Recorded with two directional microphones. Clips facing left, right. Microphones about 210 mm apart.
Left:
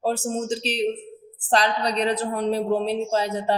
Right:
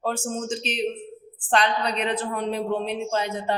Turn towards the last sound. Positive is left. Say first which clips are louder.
# left 3 dB
turn(degrees=35)  # may be behind; listen again after turning